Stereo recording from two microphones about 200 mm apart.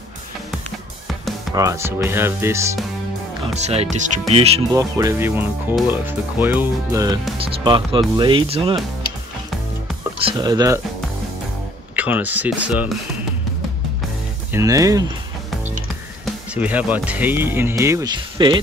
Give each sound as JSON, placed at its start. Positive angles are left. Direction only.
{"t": 1.5, "sound": "speech", "side_deg": -15}
{"t": 3.5, "sound": "speech", "side_deg": -35}
{"t": 4.7, "sound": "speech", "side_deg": -15}
{"t": 7.3, "sound": "speech", "side_deg": -25}
{"t": 10.1, "sound": "speech", "side_deg": -25}
{"t": 11.9, "sound": "speech", "side_deg": -10}
{"t": 14.5, "sound": "speech", "side_deg": -15}
{"t": 16.3, "sound": "speech", "side_deg": -10}